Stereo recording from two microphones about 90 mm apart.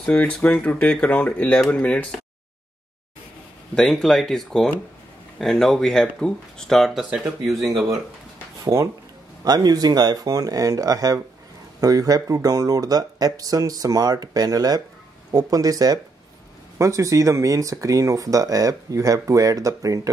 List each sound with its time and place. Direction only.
0.0 s speech: 15° left (ahead or behind)
3.7 s speech: 5° left (ahead or behind)
9.4 s speech: 50° right (ahead or behind)